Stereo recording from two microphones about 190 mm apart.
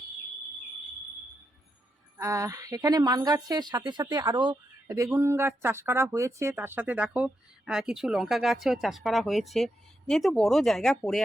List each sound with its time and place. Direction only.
2.1 s speech: 15° right (ahead or behind); by 11.2 s centre (ahead or behind)